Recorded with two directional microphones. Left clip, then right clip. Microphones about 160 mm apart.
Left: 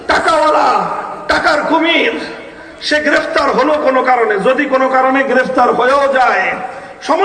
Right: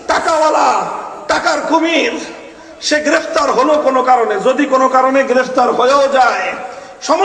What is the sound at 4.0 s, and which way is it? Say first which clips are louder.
Speech: even; 55° right (ahead or behind).